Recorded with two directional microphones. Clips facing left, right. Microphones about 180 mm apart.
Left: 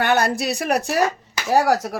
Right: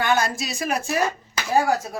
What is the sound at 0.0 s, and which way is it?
Speech, 65° left (ahead or behind).